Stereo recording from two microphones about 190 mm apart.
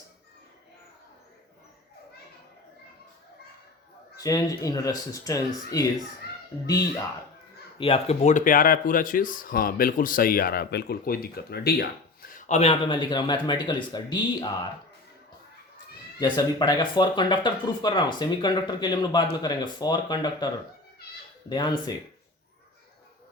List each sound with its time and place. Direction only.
4.2 s speech: 20° left (ahead or behind)
7.8 s speech: 30° left (ahead or behind); by 11.9 s 55° left (ahead or behind)
12.3 s speech: 35° left (ahead or behind)
16.2 s speech: 25° left (ahead or behind)
21.5 s speech: 20° left (ahead or behind)